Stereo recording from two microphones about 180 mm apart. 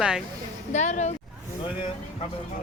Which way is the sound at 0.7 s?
40° left (ahead or behind).